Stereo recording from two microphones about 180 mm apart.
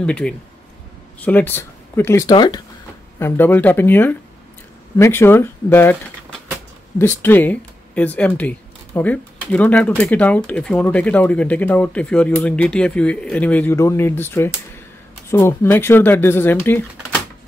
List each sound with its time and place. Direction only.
0.0 s speech: 5° left (ahead or behind); by 2.6 s 25° left (ahead or behind)
3.2 s speech: 10° left (ahead or behind)
7.0 s speech: 10° left (ahead or behind)